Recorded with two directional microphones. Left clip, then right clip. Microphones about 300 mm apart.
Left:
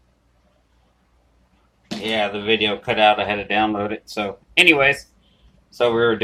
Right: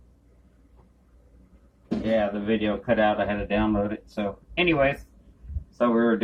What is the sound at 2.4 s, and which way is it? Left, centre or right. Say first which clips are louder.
Speech: left 7 dB; centre.